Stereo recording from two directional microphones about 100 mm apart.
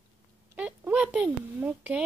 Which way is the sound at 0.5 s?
15° right (ahead or behind).